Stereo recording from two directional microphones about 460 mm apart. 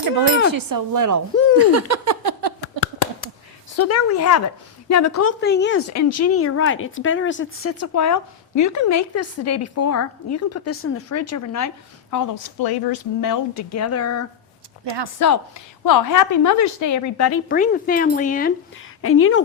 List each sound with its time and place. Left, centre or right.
0.5 s speech: right
3.8 s speech: left
5.9 s speech: left
17.5 s speech: centre
19.0 s speech: left